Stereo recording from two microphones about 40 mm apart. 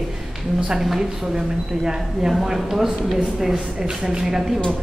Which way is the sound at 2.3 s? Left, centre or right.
Centre.